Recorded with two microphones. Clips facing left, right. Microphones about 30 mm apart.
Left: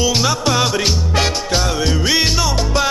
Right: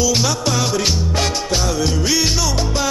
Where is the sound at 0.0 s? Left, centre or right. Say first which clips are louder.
Left 1 dB; left.